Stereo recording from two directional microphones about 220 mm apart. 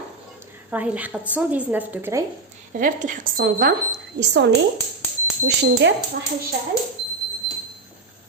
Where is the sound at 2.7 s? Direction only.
35° right (ahead or behind).